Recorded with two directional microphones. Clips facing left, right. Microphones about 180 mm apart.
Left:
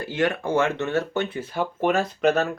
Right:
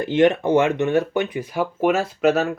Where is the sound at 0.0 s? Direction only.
20° right (ahead or behind).